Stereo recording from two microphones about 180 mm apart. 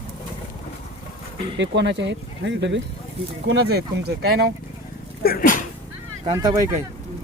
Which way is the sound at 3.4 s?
70° right (ahead or behind).